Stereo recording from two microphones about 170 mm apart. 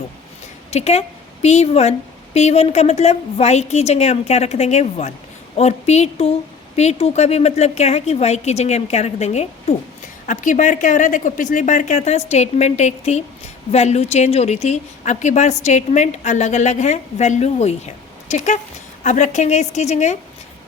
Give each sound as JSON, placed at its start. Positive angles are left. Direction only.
{"t": 0.7, "sound": "a woman's voice", "side_deg": 40}